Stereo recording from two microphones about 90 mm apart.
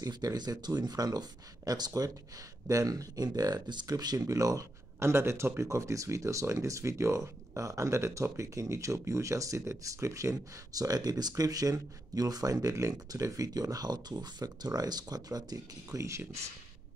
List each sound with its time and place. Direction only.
0.0 s speech: 45° right (ahead or behind)